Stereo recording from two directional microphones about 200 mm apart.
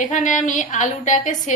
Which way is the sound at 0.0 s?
40° left (ahead or behind).